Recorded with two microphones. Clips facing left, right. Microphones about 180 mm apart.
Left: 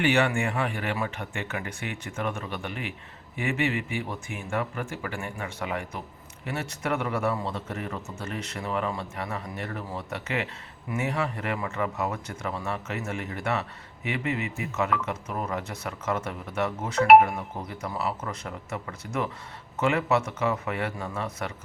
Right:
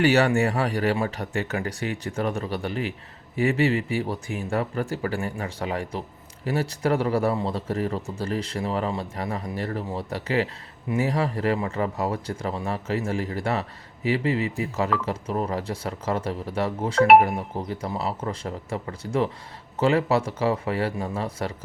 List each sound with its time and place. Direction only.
0.0 s a man's voice: 40° right (ahead or behind)